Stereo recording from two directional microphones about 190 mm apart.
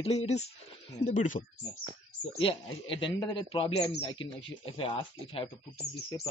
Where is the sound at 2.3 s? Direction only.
25° left (ahead or behind).